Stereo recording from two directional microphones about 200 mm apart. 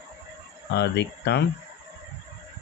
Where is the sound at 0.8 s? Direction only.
60° left (ahead or behind).